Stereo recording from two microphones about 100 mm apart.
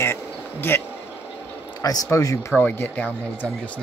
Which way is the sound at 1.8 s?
35° left (ahead or behind).